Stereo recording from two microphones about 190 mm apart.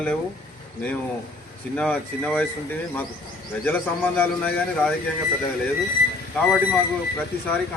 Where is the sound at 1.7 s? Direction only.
5° left (ahead or behind).